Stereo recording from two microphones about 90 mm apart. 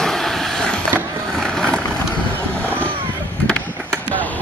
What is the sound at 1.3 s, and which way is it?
Vehicle, 5° left (ahead or behind).